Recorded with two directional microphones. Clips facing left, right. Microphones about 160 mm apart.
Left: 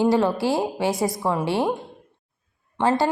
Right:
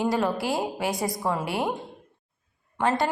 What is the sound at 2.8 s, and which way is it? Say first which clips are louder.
Speech: left 4 dB; 30° left (ahead or behind).